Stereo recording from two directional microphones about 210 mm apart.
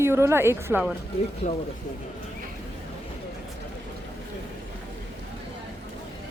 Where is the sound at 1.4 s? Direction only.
35° left (ahead or behind).